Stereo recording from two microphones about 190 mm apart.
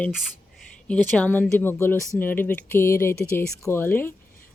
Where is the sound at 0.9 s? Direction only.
5° left (ahead or behind).